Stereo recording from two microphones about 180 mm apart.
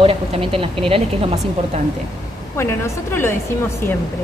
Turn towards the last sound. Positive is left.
turn(degrees=15)  # may be behind; listen again after turning